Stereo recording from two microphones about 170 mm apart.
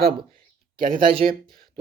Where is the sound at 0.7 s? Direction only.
55° right (ahead or behind).